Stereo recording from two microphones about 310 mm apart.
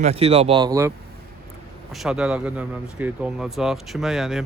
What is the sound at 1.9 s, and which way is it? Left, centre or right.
Speech, centre.